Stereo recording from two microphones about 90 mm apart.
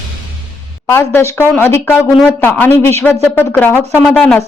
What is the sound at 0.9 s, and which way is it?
Speech, 30° left (ahead or behind).